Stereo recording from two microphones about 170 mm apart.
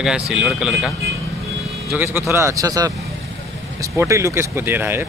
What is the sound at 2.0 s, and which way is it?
Speech, 15° right (ahead or behind).